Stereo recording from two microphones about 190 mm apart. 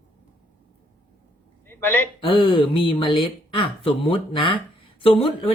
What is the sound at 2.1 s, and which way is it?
Speech, 25° left (ahead or behind).